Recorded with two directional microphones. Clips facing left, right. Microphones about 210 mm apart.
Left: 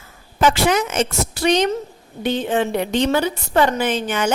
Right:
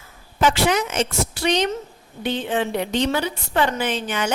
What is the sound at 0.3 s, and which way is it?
Speech, 45° left (ahead or behind).